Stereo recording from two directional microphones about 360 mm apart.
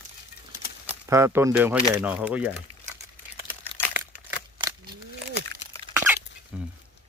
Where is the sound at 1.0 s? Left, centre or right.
Centre.